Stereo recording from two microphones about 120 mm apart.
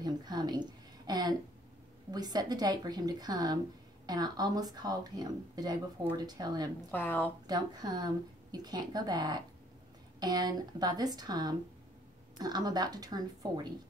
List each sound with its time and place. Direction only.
0.0 s a woman's voice: 35° right (ahead or behind)
1.0 s a sound: 35° right (ahead or behind)
2.0 s a woman's voice: 35° right (ahead or behind)
6.9 s a woman's voice: 15° left (ahead or behind)
7.4 s a woman's voice: 35° right (ahead or behind)